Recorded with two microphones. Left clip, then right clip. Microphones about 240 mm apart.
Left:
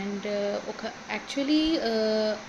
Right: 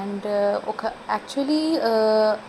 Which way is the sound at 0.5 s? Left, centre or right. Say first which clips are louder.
Right 7 dB; centre.